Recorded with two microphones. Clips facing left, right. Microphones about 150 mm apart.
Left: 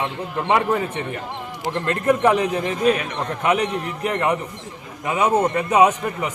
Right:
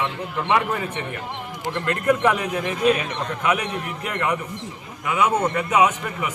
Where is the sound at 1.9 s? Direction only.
30° left (ahead or behind).